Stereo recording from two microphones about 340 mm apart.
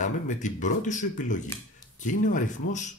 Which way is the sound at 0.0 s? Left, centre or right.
Left.